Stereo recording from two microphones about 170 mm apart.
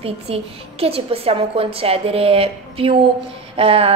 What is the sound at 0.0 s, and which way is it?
A woman's voice, 35° right (ahead or behind).